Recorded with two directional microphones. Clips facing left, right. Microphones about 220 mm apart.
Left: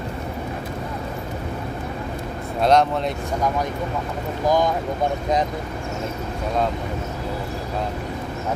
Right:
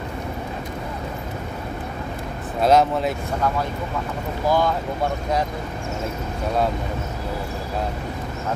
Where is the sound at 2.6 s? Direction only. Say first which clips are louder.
Right 1 dB; 5° right (ahead or behind).